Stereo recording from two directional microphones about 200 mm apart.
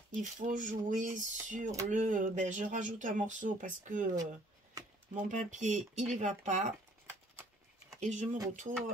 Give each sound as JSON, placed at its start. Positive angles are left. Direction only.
{"t": 0.1, "sound": "speech", "side_deg": -40}
{"t": 5.1, "sound": "speech", "side_deg": -40}
{"t": 8.0, "sound": "speech", "side_deg": -35}